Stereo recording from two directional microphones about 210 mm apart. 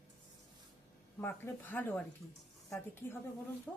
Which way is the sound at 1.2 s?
10° left (ahead or behind).